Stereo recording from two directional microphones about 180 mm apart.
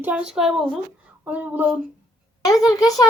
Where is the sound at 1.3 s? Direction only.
10° right (ahead or behind).